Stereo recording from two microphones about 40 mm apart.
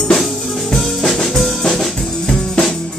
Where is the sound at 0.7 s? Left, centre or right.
Centre.